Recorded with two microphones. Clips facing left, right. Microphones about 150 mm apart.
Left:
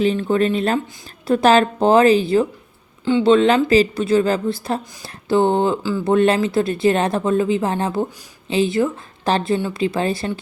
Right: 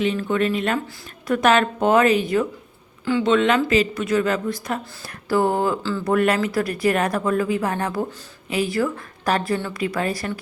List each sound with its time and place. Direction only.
0.0 s a woman's voice: 35° left (ahead or behind)